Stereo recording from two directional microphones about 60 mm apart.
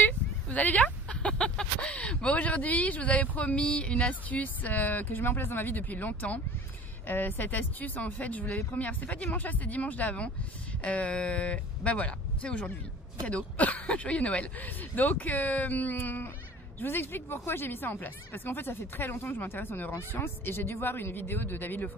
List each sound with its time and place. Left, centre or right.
0.0 s speech: left